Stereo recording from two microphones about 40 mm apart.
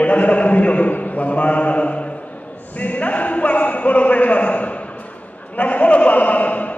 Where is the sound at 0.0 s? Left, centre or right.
Left.